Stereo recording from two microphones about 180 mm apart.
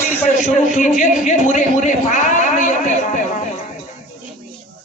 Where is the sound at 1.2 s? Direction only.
45° left (ahead or behind).